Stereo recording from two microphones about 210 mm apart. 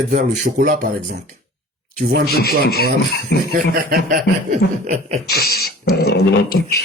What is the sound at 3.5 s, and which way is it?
Speech, 45° right (ahead or behind).